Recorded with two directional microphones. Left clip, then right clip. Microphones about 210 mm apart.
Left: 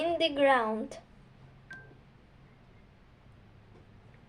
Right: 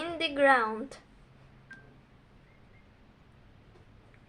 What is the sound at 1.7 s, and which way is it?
Telephone dialing, 40° left (ahead or behind).